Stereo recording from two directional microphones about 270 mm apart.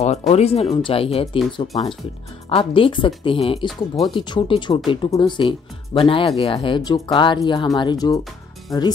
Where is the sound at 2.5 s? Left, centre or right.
Centre.